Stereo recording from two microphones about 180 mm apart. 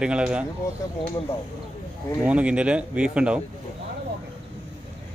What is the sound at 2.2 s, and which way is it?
Speech, 5° right (ahead or behind).